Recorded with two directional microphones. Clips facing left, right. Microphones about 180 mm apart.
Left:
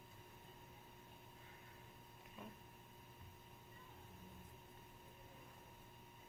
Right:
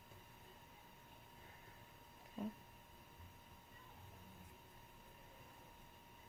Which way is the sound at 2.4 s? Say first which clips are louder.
Right 10 dB; 35° right (ahead or behind).